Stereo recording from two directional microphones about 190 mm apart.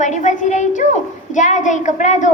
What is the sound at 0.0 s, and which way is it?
A woman's voice, 40° left (ahead or behind).